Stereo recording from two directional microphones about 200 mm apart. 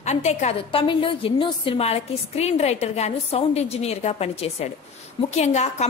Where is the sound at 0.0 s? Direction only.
35° left (ahead or behind).